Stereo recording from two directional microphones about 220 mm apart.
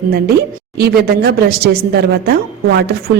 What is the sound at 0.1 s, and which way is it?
A woman's voice, 45° right (ahead or behind).